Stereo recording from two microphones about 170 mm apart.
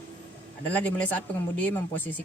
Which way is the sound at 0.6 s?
10° left (ahead or behind).